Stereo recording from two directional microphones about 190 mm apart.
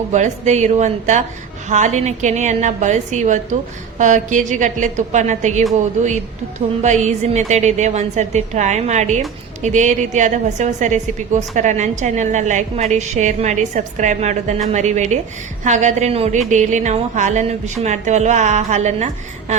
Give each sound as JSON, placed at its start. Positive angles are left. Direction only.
{"t": 0.1, "sound": "a woman's voice", "side_deg": -40}